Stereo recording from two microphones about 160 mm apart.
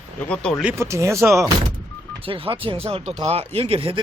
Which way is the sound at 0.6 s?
15° right (ahead or behind).